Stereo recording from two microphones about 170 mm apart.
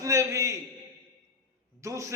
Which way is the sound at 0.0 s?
15° right (ahead or behind).